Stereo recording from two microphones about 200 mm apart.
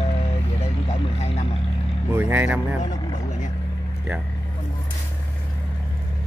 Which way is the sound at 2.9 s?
20° left (ahead or behind).